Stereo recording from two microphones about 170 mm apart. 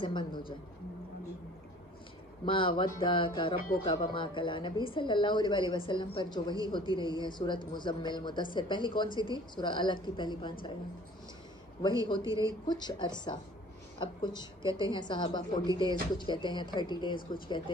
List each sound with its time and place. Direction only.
0.0 s speech: 25° left (ahead or behind)
2.4 s speech: 30° left (ahead or behind)
12.3 s speech: 20° right (ahead or behind)
12.6 s speech: 25° left (ahead or behind)
14.3 s a woman's voice: 20° right (ahead or behind)
14.7 s speech: 25° left (ahead or behind)